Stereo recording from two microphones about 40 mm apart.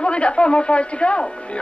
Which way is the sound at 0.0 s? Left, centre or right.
Left.